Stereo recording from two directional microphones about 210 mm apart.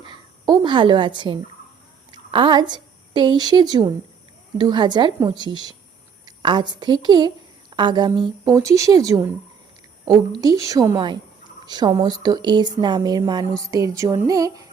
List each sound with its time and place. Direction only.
0.0 s a sound: 20° right (ahead or behind)
2.1 s a woman's voice: 20° right (ahead or behind)
10.4 s a woman's voice: 15° right (ahead or behind)